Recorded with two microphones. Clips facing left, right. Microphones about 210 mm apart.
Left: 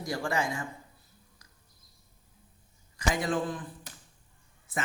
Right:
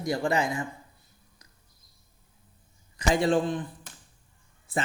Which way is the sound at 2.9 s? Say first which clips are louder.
Right 6 dB; 30° right (ahead or behind).